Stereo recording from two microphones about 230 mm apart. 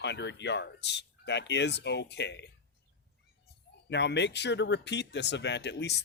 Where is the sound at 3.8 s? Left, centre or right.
Left.